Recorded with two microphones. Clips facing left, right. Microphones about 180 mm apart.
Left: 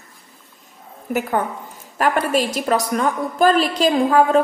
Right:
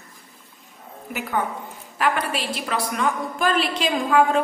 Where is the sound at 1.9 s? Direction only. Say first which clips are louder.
Left 5 dB; 45° left (ahead or behind).